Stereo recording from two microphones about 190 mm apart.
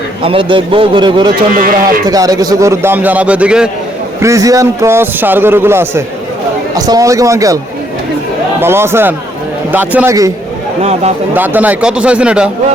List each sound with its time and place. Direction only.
0.2 s a man's voice: 30° right (ahead or behind)
1.5 s speech: 45° right (ahead or behind)
2.0 s a man's voice: 20° right (ahead or behind)
4.2 s a man's voice: 15° right (ahead or behind)
8.6 s a man's voice: 15° right (ahead or behind)
11.3 s speech: 10° right (ahead or behind)